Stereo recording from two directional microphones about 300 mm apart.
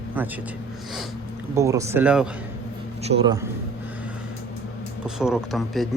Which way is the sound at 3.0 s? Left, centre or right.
Right.